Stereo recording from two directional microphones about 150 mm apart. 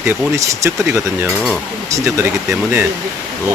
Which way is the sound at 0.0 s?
20° right (ahead or behind).